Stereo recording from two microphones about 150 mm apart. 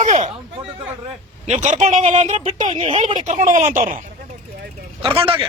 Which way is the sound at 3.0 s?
55° right (ahead or behind).